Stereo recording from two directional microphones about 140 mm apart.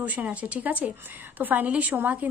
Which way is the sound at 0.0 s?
10° right (ahead or behind).